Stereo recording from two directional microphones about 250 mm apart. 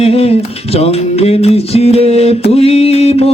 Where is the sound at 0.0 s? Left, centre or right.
Left.